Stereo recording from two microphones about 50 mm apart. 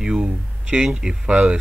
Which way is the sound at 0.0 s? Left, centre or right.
Centre.